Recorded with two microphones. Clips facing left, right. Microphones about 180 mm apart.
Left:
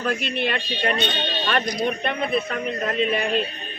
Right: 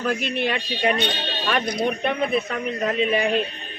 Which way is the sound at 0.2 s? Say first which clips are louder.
Right 1 dB; 50° right (ahead or behind).